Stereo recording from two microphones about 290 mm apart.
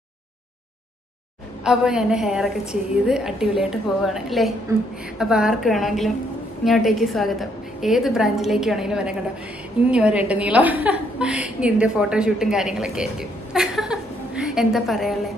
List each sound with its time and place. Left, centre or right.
1.6 s a woman's voice: centre